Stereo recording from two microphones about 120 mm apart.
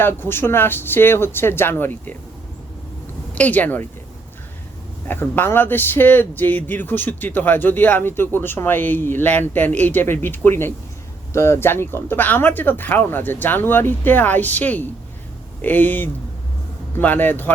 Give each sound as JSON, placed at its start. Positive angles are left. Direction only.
{"t": 0.0, "sound": "speech", "side_deg": 20}
{"t": 3.3, "sound": "speech", "side_deg": 15}
{"t": 5.0, "sound": "speech", "side_deg": 15}